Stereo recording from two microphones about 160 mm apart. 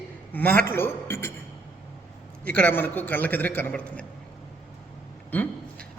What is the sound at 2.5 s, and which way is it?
A man's voice, 10° left (ahead or behind).